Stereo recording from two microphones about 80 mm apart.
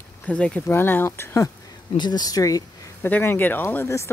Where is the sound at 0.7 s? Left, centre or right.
Left.